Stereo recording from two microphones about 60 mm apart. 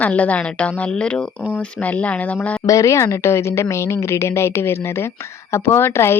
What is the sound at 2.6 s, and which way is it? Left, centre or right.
A woman's voice, left.